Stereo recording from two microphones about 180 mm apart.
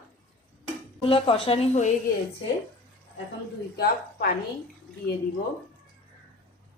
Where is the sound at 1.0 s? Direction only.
30° left (ahead or behind).